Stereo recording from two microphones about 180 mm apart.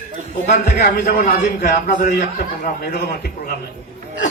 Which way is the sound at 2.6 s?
65° left (ahead or behind).